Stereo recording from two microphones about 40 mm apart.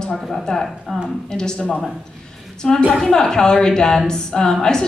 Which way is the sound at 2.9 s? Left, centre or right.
Centre.